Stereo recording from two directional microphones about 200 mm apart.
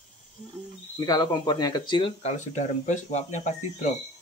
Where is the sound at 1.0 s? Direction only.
20° left (ahead or behind); by 3.9 s 35° left (ahead or behind).